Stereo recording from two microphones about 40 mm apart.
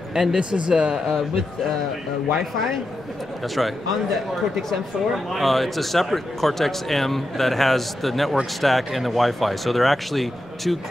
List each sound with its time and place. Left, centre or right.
0.1 s speech: centre
0.4 s speech: right
1.0 s speech: centre
3.5 s speech: centre